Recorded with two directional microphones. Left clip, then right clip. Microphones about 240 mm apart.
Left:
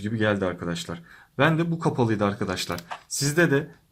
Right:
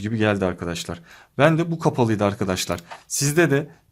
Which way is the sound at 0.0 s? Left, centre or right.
Right.